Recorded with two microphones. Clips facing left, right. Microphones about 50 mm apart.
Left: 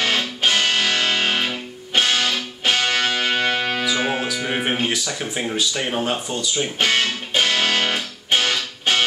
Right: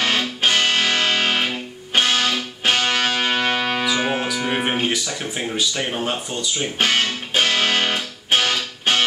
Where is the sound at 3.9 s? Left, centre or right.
Centre.